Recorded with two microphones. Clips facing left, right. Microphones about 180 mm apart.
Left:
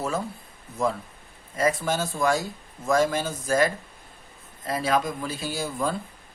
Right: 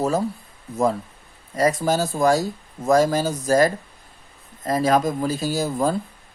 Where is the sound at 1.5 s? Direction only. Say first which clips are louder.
Right 5 dB; 40° right (ahead or behind).